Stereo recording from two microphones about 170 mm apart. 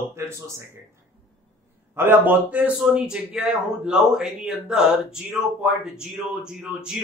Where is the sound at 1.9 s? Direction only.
10° right (ahead or behind).